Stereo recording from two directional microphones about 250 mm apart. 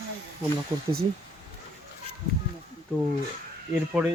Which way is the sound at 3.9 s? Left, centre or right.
Centre.